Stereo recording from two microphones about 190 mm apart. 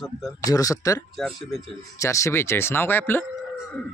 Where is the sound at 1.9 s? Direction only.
15° left (ahead or behind).